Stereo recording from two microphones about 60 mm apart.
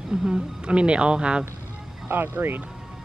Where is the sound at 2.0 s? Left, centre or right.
Right.